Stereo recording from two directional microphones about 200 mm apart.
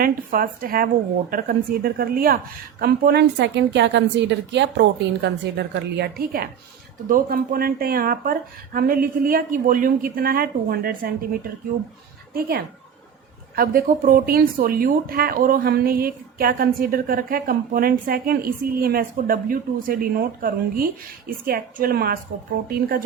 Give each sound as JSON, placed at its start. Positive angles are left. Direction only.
{"t": 0.0, "sound": "a woman's voice", "side_deg": -45}